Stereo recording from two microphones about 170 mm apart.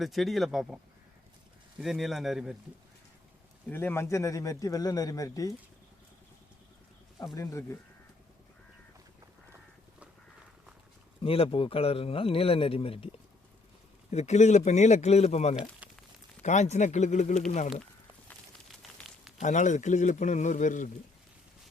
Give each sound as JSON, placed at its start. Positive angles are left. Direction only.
{"t": 0.0, "sound": "speech", "side_deg": 0}
{"t": 1.8, "sound": "speech", "side_deg": 0}
{"t": 3.7, "sound": "a man's voice", "side_deg": 10}
{"t": 7.3, "sound": "speech", "side_deg": 15}
{"t": 11.2, "sound": "a man's voice", "side_deg": 30}
{"t": 15.8, "sound": "a sound", "side_deg": -10}
{"t": 16.4, "sound": "speech", "side_deg": 40}
{"t": 18.3, "sound": "a sound", "side_deg": 0}
{"t": 19.4, "sound": "speech", "side_deg": 45}